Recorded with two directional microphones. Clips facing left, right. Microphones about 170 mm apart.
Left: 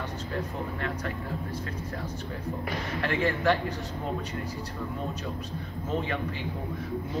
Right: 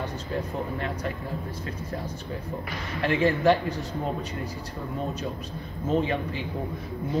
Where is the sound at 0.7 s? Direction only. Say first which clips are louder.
Right 2 dB; 20° right (ahead or behind).